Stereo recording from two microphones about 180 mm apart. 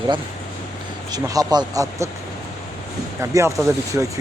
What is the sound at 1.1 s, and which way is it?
Speech, 20° right (ahead or behind).